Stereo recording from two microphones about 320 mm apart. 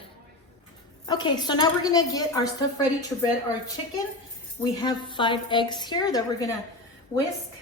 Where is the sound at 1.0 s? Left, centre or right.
Centre.